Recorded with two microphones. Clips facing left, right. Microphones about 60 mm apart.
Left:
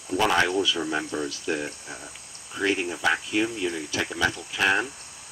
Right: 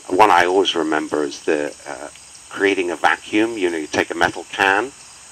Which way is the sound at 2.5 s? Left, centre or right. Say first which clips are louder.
Right 8 dB; right.